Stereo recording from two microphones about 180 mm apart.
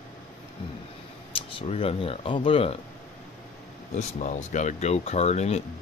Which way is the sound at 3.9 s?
40° left (ahead or behind).